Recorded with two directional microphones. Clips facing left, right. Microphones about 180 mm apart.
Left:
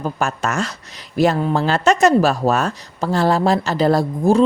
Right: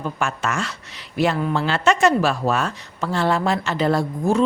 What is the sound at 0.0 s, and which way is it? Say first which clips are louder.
Speech: left 3 dB; 40° left (ahead or behind).